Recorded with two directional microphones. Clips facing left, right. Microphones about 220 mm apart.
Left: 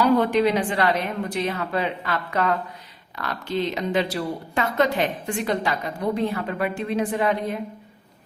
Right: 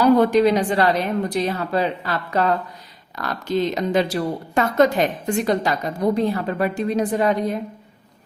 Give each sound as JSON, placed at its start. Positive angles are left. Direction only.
{"t": 0.0, "sound": "a woman's voice", "side_deg": -40}